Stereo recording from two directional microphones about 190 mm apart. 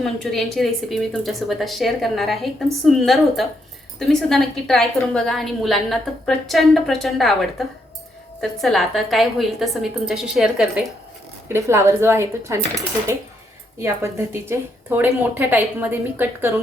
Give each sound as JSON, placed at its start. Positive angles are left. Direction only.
{"t": 0.0, "sound": "a woman's voice", "side_deg": 0}
{"t": 11.4, "sound": "a woman's voice", "side_deg": -15}